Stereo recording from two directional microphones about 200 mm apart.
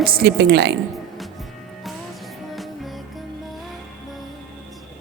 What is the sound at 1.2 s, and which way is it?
Music, centre (ahead or behind).